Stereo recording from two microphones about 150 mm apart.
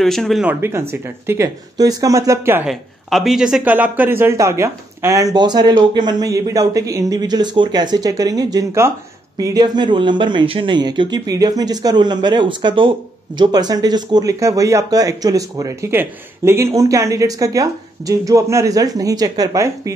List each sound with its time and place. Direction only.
0.0 s speech: centre (ahead or behind)
0.5 s speech: 15° right (ahead or behind)
2.6 s speech: centre (ahead or behind); by 19.9 s 20° right (ahead or behind)